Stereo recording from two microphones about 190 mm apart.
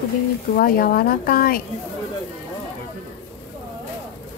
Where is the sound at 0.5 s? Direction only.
50° left (ahead or behind).